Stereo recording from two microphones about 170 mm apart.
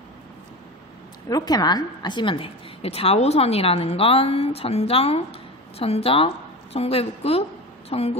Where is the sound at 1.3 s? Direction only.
20° left (ahead or behind).